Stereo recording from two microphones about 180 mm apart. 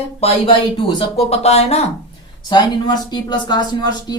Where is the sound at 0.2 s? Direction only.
30° left (ahead or behind).